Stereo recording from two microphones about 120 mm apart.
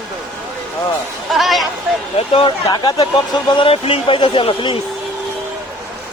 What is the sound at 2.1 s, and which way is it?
Speech, 50° left (ahead or behind).